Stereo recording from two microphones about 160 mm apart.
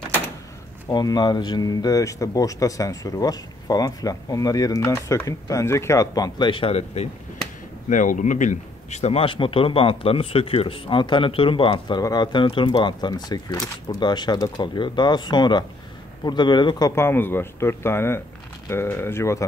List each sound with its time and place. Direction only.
0.8 s speech: 25° left (ahead or behind)
7.9 s a man's voice: 50° left (ahead or behind); by 19.4 s 15° left (ahead or behind)